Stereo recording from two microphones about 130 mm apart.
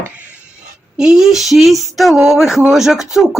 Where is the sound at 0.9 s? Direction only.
5° right (ahead or behind).